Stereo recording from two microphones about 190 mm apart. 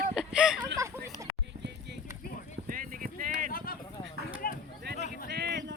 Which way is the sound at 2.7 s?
45° right (ahead or behind).